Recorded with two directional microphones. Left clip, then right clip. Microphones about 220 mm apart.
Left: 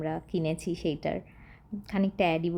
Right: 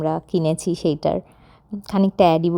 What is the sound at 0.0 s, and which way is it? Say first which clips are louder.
A woman's voice: right 10 dB; 30° right (ahead or behind).